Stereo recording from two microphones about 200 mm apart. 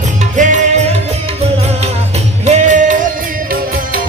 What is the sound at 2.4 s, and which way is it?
Music, 35° right (ahead or behind).